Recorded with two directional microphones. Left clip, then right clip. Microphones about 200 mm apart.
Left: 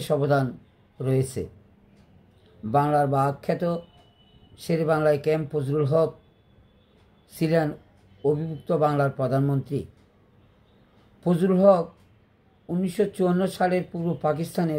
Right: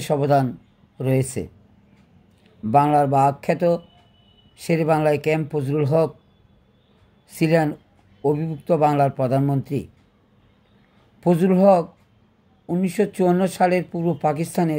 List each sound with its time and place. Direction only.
0.0 s speech: 35° right (ahead or behind)
2.7 s speech: 35° right (ahead or behind)
7.2 s speech: 35° right (ahead or behind)
11.1 s speech: 35° right (ahead or behind)